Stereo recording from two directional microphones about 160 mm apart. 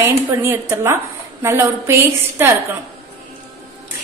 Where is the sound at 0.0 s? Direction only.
15° right (ahead or behind).